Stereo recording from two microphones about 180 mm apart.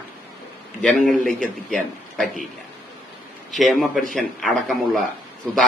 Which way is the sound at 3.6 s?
Centre (ahead or behind).